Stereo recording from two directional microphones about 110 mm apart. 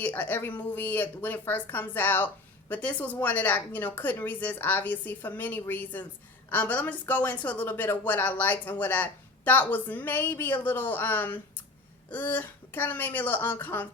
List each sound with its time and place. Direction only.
0.0 s a woman's voice: 15° left (ahead or behind)